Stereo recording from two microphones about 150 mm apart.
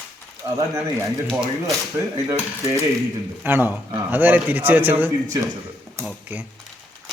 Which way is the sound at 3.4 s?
10° right (ahead or behind).